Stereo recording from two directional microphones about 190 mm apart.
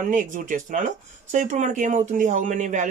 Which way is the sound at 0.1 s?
45° right (ahead or behind).